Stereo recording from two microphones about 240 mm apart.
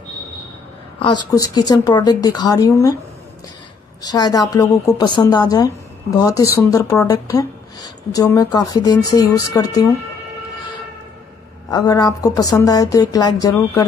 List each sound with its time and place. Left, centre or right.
0.9 s speech: centre
4.0 s speech: centre
11.7 s speech: centre